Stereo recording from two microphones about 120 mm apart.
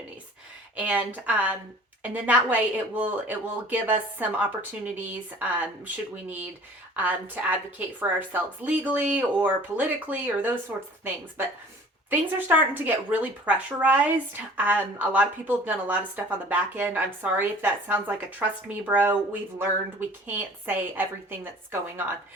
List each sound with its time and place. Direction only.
0.8 s a woman's voice: 15° right (ahead or behind)
6.9 s a woman's voice: 15° right (ahead or behind)
12.1 s a woman's voice: 15° right (ahead or behind)